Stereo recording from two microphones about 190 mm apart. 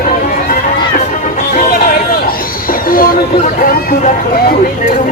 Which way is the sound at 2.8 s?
50° left (ahead or behind).